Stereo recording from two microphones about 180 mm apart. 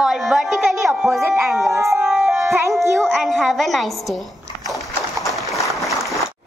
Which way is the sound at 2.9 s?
Centre (ahead or behind).